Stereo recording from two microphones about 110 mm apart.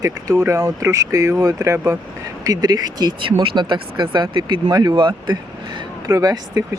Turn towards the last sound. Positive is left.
turn(degrees=-35)  # may be behind; listen again after turning